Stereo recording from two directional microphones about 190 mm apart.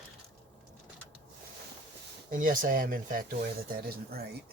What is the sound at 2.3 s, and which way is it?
Speech, 45° right (ahead or behind).